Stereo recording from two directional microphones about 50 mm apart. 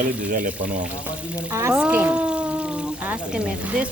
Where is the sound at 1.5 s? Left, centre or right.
Right.